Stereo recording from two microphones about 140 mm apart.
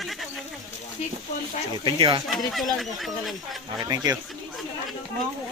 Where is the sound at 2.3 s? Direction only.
Centre (ahead or behind).